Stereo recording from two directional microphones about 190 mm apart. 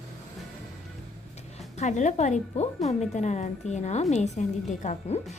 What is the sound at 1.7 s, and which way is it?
A woman's voice, 40° left (ahead or behind).